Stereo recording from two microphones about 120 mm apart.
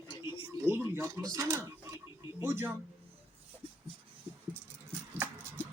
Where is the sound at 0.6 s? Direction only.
20° right (ahead or behind).